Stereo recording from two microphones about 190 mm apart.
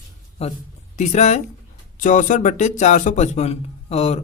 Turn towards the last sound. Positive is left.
turn(degrees=35)  # may be behind; listen again after turning